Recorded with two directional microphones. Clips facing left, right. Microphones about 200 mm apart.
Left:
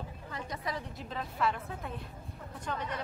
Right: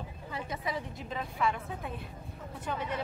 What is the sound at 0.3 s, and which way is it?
A woman's voice, 5° right (ahead or behind).